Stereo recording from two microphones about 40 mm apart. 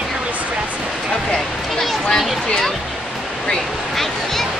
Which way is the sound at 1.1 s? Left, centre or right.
Centre.